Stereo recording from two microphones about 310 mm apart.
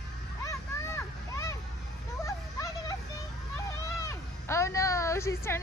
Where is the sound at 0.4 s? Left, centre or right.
Centre.